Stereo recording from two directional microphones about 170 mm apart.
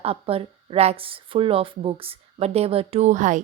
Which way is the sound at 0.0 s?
35° right (ahead or behind).